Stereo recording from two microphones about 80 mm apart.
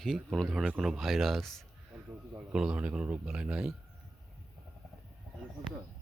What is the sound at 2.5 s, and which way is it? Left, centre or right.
Speech, centre.